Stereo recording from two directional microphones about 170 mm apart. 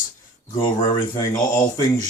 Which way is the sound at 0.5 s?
30° left (ahead or behind).